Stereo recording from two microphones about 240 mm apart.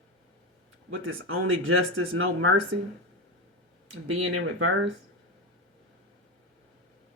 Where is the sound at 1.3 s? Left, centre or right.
Right.